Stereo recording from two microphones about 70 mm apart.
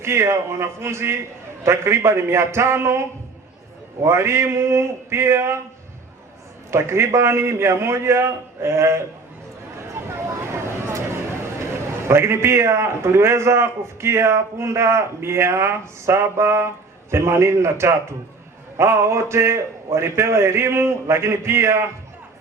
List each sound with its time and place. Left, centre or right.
0.0 s a man's voice: right
4.0 s a man's voice: right
6.7 s a man's voice: right
9.7 s a sound: right
12.0 s a man's voice: right